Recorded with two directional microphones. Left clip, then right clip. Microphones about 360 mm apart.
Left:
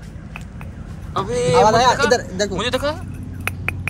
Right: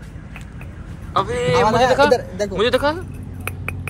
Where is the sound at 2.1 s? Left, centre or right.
Left.